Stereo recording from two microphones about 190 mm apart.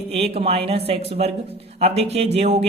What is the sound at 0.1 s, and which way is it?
A man's voice, 30° right (ahead or behind).